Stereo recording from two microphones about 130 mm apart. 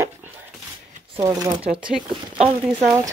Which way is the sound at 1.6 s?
45° right (ahead or behind).